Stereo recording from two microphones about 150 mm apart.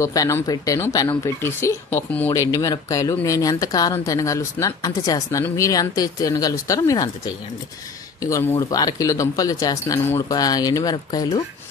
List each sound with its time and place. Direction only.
0.0 s speech: 20° left (ahead or behind)
8.2 s speech: 20° left (ahead or behind)